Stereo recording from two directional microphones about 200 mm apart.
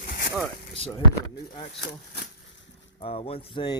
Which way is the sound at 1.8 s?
55° left (ahead or behind).